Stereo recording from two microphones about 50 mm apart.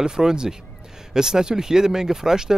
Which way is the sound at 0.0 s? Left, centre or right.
Centre.